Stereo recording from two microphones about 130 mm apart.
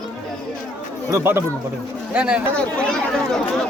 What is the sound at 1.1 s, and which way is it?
Speech, 15° right (ahead or behind).